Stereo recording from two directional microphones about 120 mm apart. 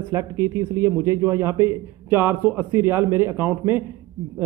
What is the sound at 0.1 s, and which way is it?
A man's voice, 25° right (ahead or behind).